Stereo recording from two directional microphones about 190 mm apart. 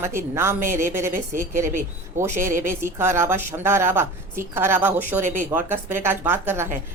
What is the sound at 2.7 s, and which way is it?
A woman's voice, 10° right (ahead or behind).